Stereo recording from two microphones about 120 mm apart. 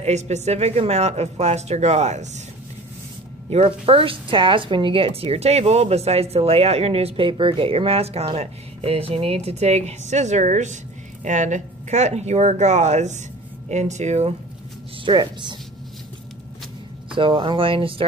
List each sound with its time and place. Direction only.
0.0 s speech: 70° right (ahead or behind)
3.4 s speech: 60° right (ahead or behind)
15.0 s a woman's voice: 40° right (ahead or behind)
17.1 s speech: 45° right (ahead or behind)